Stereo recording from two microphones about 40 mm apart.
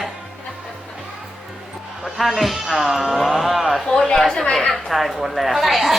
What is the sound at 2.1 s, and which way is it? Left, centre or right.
A child's voice, centre.